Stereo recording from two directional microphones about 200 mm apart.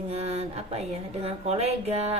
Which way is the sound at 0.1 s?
30° right (ahead or behind).